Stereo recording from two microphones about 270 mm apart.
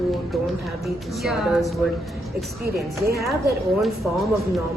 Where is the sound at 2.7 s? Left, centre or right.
Centre.